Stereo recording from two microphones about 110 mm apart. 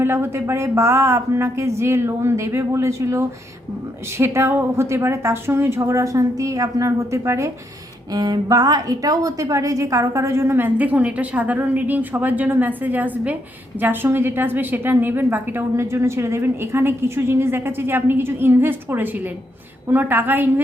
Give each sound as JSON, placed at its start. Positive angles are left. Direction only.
{"t": 0.0, "sound": "a woman's voice", "side_deg": -20}